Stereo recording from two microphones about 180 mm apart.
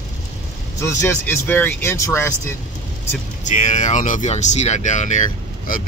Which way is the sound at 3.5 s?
45° left (ahead or behind).